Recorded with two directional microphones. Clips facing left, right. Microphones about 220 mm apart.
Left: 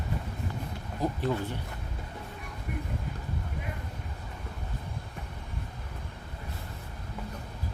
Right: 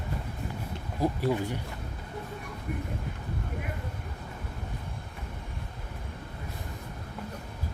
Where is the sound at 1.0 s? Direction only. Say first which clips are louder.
Right 2 dB; 10° right (ahead or behind).